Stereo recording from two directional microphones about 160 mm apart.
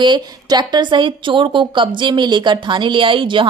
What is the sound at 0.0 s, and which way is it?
A woman's voice, 30° right (ahead or behind).